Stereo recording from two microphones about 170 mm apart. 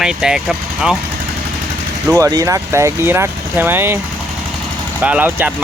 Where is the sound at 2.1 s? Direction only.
20° right (ahead or behind).